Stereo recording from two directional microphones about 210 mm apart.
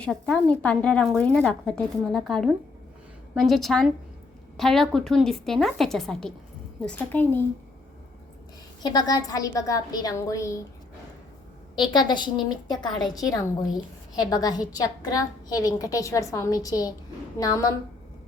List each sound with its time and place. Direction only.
0.0 s a woman's voice: 5° left (ahead or behind)
8.8 s a woman's voice: 20° left (ahead or behind)
11.9 s a woman's voice: 20° left (ahead or behind)